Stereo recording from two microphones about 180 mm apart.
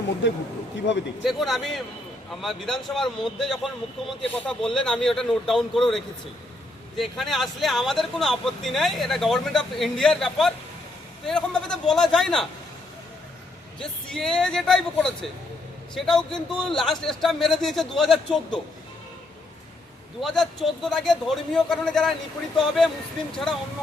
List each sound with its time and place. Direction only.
0.2 s speech: 90° left
1.2 s speech: centre (ahead or behind)
13.7 s speech: 5° left (ahead or behind)
20.2 s speech: centre (ahead or behind)